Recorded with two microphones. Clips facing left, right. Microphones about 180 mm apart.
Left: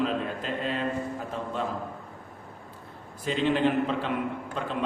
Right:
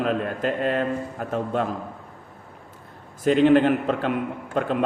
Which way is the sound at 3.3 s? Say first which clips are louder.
Right 8 dB; 55° right (ahead or behind).